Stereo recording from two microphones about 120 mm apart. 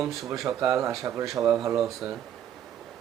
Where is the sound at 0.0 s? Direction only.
Centre (ahead or behind).